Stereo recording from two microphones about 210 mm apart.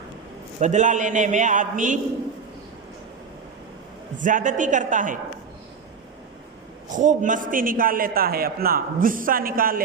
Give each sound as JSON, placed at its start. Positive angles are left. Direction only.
{"t": 0.6, "sound": "a man's voice", "side_deg": -35}
{"t": 4.2, "sound": "a man's voice", "side_deg": -40}
{"t": 6.9, "sound": "a man's voice", "side_deg": -35}